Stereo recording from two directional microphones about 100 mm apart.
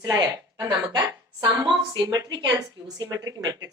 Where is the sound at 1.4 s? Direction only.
45° right (ahead or behind).